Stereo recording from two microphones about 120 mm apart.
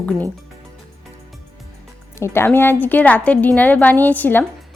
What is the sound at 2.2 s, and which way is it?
A woman's voice, 20° left (ahead or behind).